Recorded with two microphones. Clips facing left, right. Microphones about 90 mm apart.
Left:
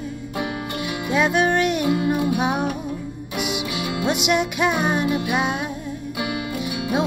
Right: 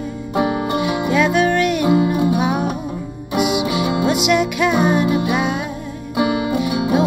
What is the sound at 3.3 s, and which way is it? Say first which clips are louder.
Music: right 9 dB; 15° right (ahead or behind).